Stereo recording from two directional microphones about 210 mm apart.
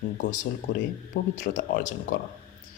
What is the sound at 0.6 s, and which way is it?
Speech, 35° left (ahead or behind).